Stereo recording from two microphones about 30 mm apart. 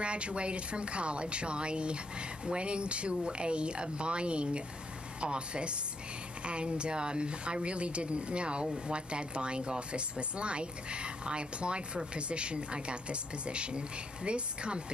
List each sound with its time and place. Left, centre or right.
0.0 s speech: right